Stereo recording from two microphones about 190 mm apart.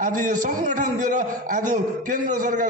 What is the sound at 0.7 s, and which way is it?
A man's voice, 40° right (ahead or behind).